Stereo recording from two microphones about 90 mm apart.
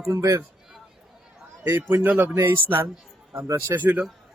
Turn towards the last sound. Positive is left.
turn(degrees=-20)  # may be behind; listen again after turning